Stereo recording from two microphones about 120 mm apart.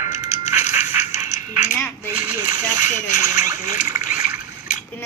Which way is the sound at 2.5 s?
30° right (ahead or behind).